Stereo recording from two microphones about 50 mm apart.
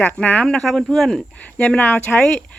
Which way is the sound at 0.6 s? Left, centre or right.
Centre.